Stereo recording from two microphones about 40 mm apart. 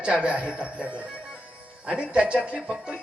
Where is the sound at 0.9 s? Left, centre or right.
Right.